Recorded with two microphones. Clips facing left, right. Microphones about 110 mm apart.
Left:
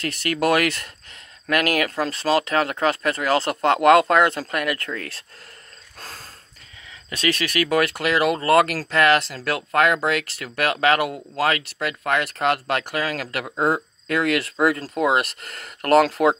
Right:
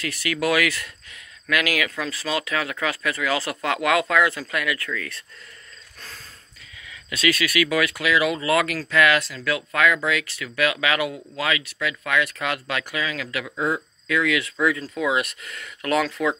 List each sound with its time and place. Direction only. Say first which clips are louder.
0.3 s speech: left 2 dB; 50° left (ahead or behind)
3.8 s speech: left 5 dB; 55° left (ahead or behind)
4.4 s speech: left 2 dB; 45° left (ahead or behind)
5.9 s snort: left 4 dB; 40° left (ahead or behind)
6.9 s speech: right 1 dB; 40° left (ahead or behind)
8.1 s speech: left 3 dB; 55° left (ahead or behind)
14.8 s speech: left 4 dB; 40° left (ahead or behind)
15.8 s speech: left 6 dB; 55° left (ahead or behind)